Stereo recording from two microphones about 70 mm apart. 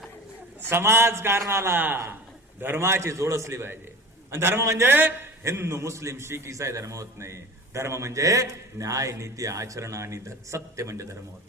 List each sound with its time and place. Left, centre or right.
0.7 s a man's voice: right
5.4 s a man's voice: right